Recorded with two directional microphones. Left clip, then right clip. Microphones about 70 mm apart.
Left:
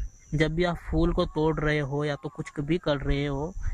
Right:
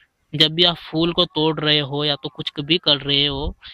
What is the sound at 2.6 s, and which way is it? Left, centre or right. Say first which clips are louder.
Speech: right 10 dB; centre.